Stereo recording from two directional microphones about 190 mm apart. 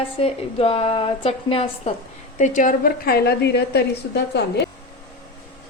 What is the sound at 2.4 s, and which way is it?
A woman's voice, 45° left (ahead or behind).